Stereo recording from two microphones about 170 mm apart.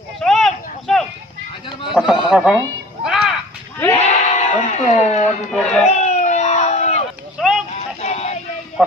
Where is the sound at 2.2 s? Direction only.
5° right (ahead or behind).